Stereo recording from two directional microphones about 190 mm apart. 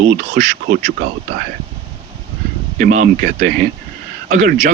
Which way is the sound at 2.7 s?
45° right (ahead or behind).